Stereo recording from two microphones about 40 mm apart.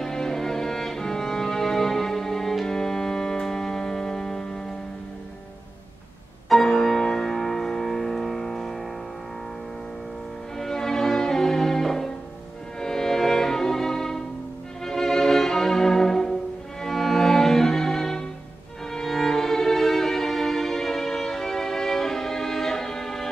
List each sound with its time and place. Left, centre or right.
0.0 s music: centre
6.5 s music: centre
10.6 s music: centre
12.8 s violin: centre
16.8 s music: centre